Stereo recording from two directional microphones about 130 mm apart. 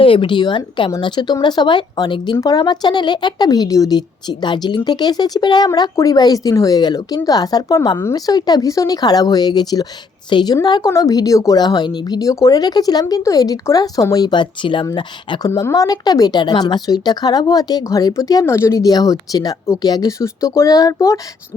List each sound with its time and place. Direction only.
0.0 s speech: 40° left (ahead or behind); by 21.2 s 25° left (ahead or behind)